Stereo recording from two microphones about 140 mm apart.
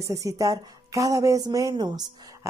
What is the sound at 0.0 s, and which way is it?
A woman's voice, 25° right (ahead or behind).